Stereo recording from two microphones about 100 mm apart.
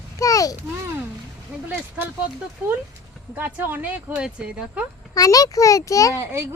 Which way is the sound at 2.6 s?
15° right (ahead or behind).